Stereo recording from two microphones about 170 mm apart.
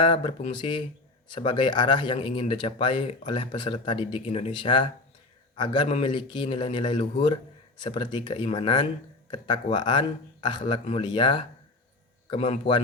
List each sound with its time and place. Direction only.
0.0 s a man's voice: 30° left (ahead or behind)